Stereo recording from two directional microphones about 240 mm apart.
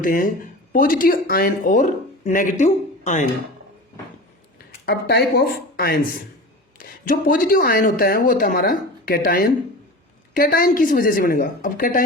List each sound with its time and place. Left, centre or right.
0.0 s speech: left
4.5 s speech: left